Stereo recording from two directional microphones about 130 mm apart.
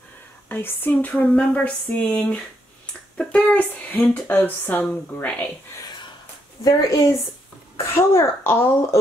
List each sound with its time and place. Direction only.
0.5 s speech: 15° left (ahead or behind)
6.6 s speech: 25° left (ahead or behind)